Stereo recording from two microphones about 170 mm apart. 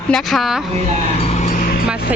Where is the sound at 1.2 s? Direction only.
50° left (ahead or behind).